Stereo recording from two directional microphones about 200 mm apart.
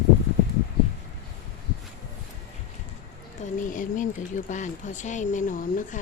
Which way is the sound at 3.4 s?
40° left (ahead or behind).